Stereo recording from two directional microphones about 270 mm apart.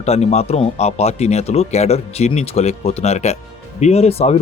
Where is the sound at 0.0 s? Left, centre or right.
Left.